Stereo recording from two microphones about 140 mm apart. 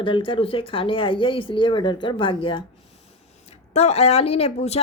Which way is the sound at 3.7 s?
50° left (ahead or behind).